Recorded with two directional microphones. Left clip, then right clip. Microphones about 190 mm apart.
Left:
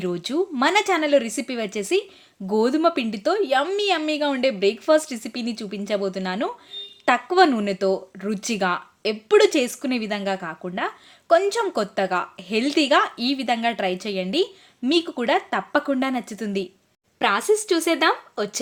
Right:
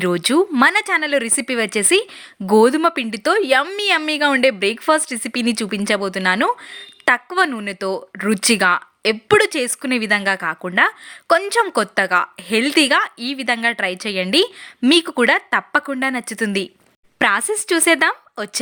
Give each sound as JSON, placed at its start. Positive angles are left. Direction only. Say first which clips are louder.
{"t": 0.0, "sound": "speech", "louder": "right 8 dB", "side_deg": -15}